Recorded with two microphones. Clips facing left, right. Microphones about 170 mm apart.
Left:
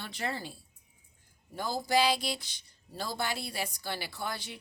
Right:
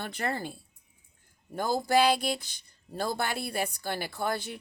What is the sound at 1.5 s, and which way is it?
Speech, 50° right (ahead or behind).